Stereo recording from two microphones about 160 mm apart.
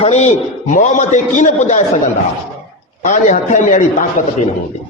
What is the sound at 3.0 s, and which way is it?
A man's voice, 50° left (ahead or behind).